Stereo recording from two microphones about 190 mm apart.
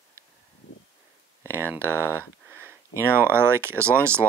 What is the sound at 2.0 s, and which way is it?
Speech, 10° left (ahead or behind).